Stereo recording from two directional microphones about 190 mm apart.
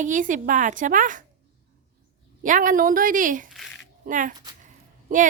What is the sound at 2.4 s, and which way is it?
A woman's voice, 45° right (ahead or behind).